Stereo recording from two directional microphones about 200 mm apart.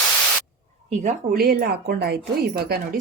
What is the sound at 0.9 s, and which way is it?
Speech, 40° right (ahead or behind).